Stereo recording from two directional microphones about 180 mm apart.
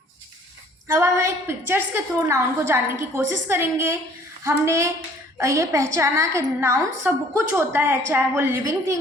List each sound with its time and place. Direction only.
0.9 s a woman's voice: 15° right (ahead or behind)